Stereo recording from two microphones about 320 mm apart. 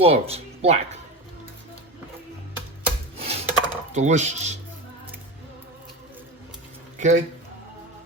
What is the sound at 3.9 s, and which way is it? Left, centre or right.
Speech, right.